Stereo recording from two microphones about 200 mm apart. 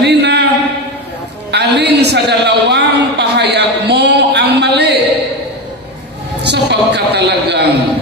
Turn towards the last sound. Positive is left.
turn(degrees=-55)  # may be behind; listen again after turning